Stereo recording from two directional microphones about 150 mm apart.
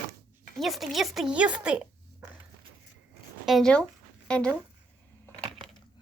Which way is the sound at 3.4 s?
Centre (ahead or behind).